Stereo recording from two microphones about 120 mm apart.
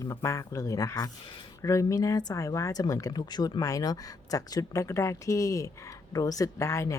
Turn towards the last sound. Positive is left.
turn(degrees=25)  # may be behind; listen again after turning